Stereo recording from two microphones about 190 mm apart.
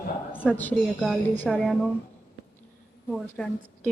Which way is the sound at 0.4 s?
5° left (ahead or behind).